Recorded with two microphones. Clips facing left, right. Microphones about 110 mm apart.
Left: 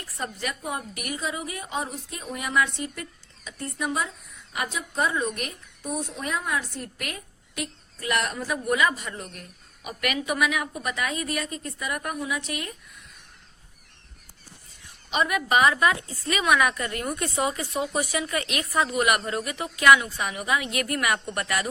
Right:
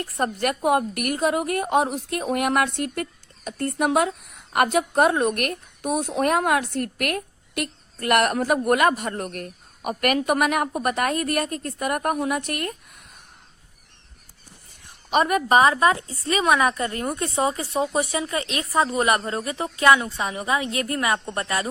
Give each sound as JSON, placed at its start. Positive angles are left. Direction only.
{"t": 0.0, "sound": "a woman's voice", "side_deg": -55}
{"t": 14.8, "sound": "a woman's voice", "side_deg": -45}